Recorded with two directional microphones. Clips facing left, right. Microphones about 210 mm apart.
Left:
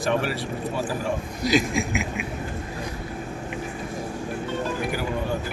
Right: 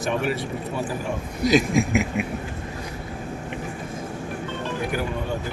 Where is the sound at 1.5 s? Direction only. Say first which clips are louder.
Right 3 dB; 45° right (ahead or behind).